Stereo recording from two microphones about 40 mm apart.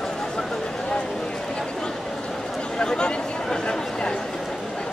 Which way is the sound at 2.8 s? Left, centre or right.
Left.